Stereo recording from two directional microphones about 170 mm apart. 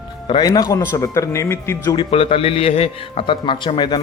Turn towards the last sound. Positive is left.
turn(degrees=25)  # may be behind; listen again after turning